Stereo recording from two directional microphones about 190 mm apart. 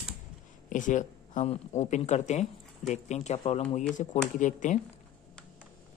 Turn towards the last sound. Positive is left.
turn(degrees=40)  # may be behind; listen again after turning